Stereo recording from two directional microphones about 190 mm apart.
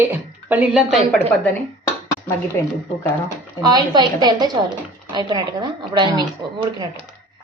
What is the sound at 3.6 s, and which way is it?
A woman's voice, 20° right (ahead or behind).